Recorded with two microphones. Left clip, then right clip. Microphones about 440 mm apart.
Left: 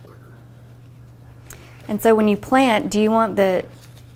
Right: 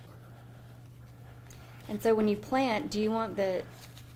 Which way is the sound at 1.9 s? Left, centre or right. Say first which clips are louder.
Left 11 dB; centre.